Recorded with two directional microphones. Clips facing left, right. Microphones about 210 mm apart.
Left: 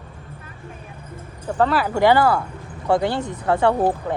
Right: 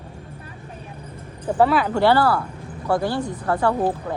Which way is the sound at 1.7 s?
5° left (ahead or behind).